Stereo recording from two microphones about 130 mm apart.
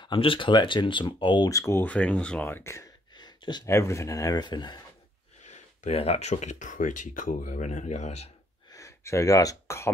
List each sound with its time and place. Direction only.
0.0 s speech: 40° left (ahead or behind)
1.5 s speech: 20° left (ahead or behind)
3.2 s a sound: 35° left (ahead or behind)
3.6 s speech: 20° left (ahead or behind)
5.4 s speech: 60° left (ahead or behind)
8.6 s gasp: 25° left (ahead or behind)